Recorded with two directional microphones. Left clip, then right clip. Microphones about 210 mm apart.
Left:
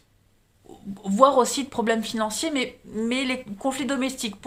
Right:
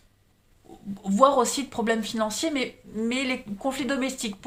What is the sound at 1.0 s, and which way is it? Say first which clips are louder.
Speech: left 2 dB; 20° left (ahead or behind).